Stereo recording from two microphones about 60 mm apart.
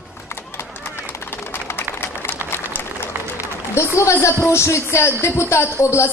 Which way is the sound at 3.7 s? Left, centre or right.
Left.